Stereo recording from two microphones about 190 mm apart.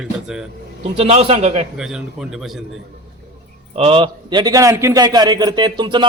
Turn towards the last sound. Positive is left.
turn(degrees=-25)  # may be behind; listen again after turning